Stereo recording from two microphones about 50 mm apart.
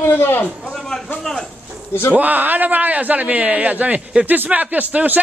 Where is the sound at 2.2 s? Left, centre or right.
Right.